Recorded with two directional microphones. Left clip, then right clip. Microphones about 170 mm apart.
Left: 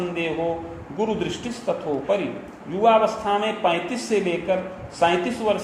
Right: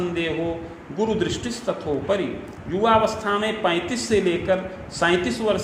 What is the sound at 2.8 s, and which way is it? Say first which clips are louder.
A man's voice: left 1 dB; 35° right (ahead or behind).